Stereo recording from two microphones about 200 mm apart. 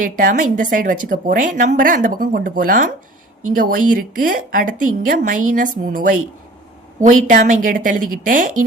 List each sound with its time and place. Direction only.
0.0 s a woman's voice: 40° right (ahead or behind)